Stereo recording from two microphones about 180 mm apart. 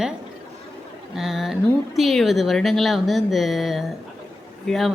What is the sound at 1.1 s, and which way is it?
A woman's voice, centre (ahead or behind).